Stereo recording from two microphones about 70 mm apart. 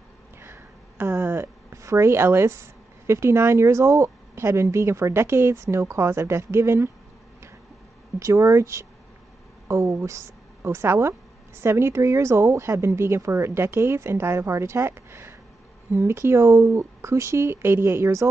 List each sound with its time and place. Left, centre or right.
0.4 s a sound: right
1.7 s a woman's voice: right
8.2 s a woman's voice: right